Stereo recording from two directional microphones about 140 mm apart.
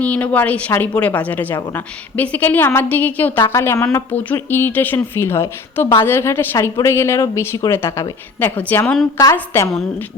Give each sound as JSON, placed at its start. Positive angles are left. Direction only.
{"t": 0.0, "sound": "a woman's voice", "side_deg": 10}